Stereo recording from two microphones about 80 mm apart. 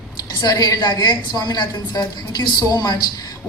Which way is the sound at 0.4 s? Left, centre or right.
Left.